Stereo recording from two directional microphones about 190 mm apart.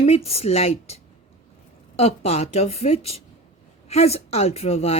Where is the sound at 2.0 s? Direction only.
35° left (ahead or behind).